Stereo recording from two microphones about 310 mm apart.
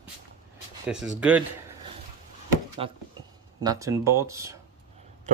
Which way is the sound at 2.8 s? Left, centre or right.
Centre.